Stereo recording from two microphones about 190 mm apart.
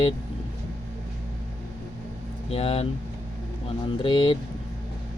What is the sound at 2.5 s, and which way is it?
Speech, 30° left (ahead or behind).